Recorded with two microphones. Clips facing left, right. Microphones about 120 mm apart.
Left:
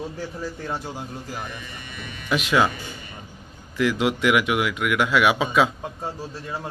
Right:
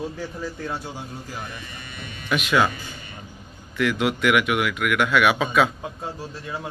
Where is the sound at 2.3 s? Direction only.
30° left (ahead or behind).